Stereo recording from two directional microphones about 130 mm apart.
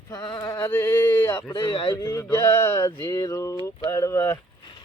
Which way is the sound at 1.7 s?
40° left (ahead or behind).